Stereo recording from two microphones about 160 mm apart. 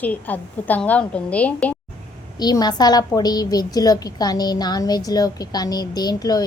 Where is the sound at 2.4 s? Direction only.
25° left (ahead or behind).